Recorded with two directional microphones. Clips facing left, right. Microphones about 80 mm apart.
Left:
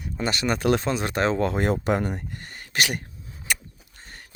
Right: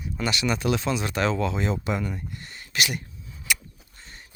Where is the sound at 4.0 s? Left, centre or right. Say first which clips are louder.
Left 2 dB; left.